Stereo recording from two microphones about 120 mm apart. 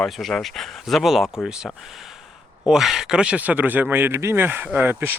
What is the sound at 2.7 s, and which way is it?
Speech, 5° right (ahead or behind).